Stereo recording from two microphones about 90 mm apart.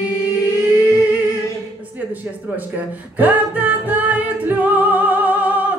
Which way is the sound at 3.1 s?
20° right (ahead or behind).